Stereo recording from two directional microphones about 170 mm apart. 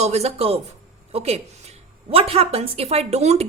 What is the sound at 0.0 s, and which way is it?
A woman's voice, 40° right (ahead or behind).